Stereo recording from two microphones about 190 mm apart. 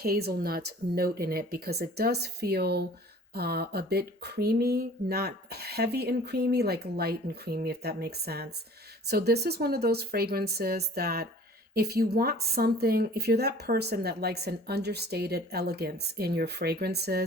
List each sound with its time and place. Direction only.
0.0 s speech: 55° right (ahead or behind)